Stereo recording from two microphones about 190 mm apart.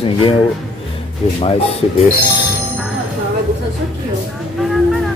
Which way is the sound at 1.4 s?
30° left (ahead or behind).